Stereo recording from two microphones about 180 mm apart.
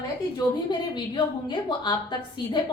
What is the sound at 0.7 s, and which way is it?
A woman's voice, 25° left (ahead or behind).